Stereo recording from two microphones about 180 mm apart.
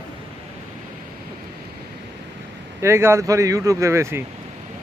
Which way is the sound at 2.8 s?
15° right (ahead or behind).